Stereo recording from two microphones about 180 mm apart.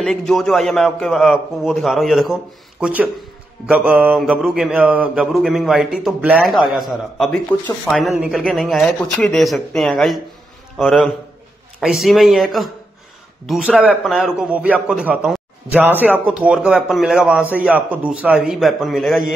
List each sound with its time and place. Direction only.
0.0 s mantra: centre (ahead or behind)
2.8 s a man's voice: 10° right (ahead or behind)
3.6 s mantra: 10° right (ahead or behind)